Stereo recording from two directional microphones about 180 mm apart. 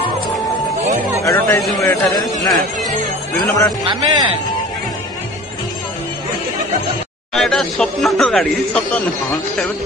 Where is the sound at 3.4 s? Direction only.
15° left (ahead or behind).